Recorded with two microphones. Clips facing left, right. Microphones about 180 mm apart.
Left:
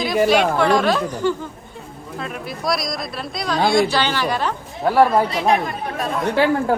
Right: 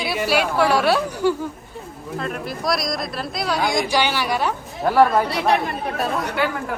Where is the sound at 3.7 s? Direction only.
10° right (ahead or behind).